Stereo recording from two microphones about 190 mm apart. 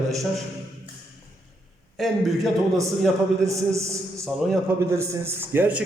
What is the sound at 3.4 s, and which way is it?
A man's voice, 15° right (ahead or behind).